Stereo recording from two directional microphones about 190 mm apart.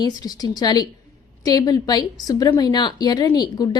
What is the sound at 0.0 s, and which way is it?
A woman's voice, 20° left (ahead or behind).